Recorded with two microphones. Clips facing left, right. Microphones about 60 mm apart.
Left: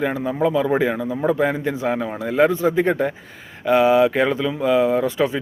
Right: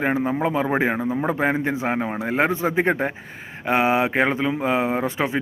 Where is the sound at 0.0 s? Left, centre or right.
Right.